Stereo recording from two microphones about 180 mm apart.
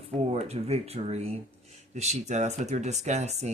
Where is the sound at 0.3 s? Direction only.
35° right (ahead or behind).